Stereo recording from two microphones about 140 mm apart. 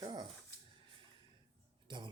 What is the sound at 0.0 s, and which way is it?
Dog, 30° right (ahead or behind).